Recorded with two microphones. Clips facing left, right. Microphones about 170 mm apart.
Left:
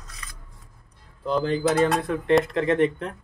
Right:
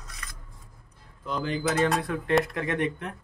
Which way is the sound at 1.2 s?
35° left (ahead or behind).